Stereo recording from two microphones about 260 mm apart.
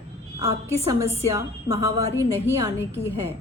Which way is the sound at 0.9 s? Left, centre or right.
Centre.